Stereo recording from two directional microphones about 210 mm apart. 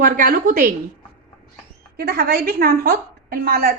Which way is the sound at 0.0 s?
40° right (ahead or behind).